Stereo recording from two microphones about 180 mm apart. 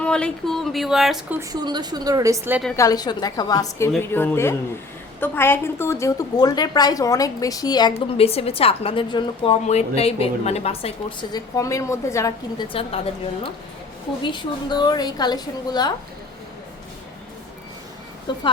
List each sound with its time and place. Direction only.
0.0 s speech: 5° left (ahead or behind)
1.4 s a woman's voice: 25° right (ahead or behind)
2.7 s a woman's voice: 20° left (ahead or behind)
12.6 s a woman's voice: 30° left (ahead or behind)
14.2 s a woman's voice: 25° left (ahead or behind)
18.3 s a woman's voice: 25° left (ahead or behind)